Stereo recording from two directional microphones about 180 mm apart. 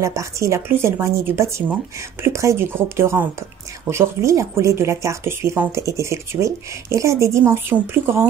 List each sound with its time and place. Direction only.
0.0 s speech: 15° right (ahead or behind)